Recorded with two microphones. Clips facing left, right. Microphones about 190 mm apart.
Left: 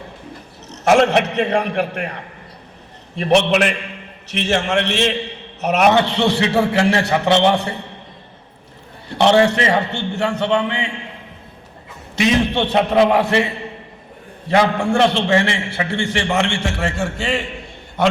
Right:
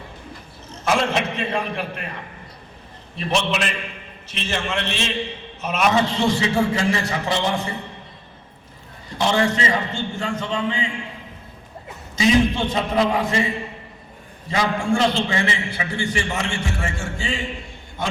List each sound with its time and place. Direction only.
0.7 s a man's voice: 70° left (ahead or behind)
3.2 s a man's voice: 65° left (ahead or behind)
9.0 s a man's voice: 70° left (ahead or behind)
12.1 s a man's voice: 70° left (ahead or behind)